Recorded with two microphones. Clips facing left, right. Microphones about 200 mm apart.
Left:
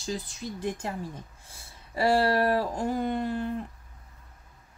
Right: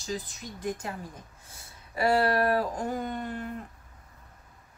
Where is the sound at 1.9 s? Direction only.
30° left (ahead or behind).